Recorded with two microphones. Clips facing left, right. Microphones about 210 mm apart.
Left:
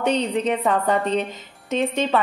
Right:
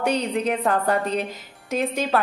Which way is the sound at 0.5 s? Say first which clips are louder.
Even; centre (ahead or behind).